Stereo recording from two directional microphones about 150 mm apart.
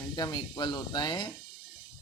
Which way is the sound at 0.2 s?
30° left (ahead or behind).